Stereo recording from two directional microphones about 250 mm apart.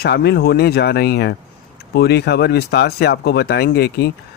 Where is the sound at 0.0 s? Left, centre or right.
Left.